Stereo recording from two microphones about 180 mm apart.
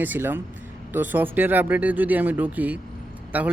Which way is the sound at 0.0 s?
10° right (ahead or behind).